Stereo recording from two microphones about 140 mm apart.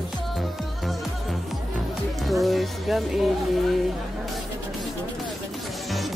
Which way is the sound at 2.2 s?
Centre (ahead or behind).